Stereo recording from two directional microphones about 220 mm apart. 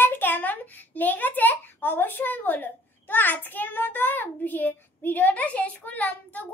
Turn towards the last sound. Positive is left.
turn(degrees=5)  # may be behind; listen again after turning